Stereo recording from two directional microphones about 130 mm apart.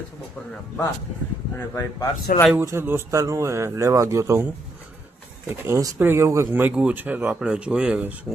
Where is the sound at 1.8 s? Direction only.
25° left (ahead or behind).